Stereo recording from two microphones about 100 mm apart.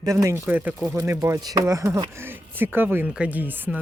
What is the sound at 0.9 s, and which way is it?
Speech, 30° right (ahead or behind).